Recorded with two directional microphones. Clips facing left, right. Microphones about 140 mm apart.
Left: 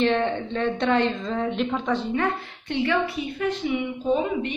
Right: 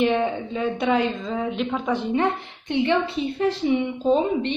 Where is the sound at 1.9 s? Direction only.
20° right (ahead or behind).